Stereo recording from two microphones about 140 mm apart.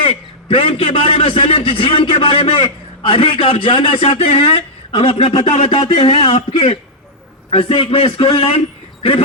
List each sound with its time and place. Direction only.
0.0 s a man's voice: 40° left (ahead or behind)